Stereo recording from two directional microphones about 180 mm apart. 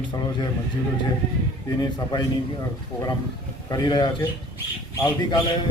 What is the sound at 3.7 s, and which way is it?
Speech, 20° left (ahead or behind).